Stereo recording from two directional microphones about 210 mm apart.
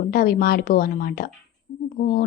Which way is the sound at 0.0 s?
45° left (ahead or behind).